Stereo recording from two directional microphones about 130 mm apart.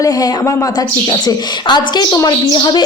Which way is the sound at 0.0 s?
25° left (ahead or behind).